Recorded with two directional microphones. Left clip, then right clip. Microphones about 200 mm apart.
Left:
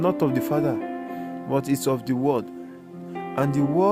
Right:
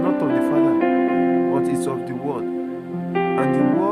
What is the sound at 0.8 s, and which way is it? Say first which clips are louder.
Music: right 13 dB; 40° right (ahead or behind).